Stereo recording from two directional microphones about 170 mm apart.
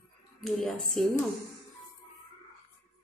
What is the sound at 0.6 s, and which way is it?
Speech, centre (ahead or behind).